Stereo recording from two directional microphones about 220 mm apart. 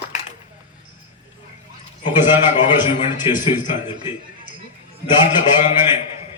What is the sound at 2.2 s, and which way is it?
A man's voice, 20° left (ahead or behind).